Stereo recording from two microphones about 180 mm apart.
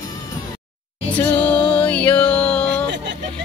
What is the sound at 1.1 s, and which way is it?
Music, 10° left (ahead or behind).